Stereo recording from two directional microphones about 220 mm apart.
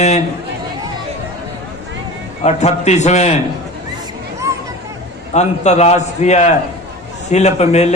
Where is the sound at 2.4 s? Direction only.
30° left (ahead or behind).